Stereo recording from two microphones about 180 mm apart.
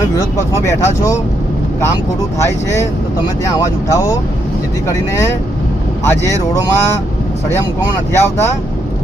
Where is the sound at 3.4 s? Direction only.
20° left (ahead or behind).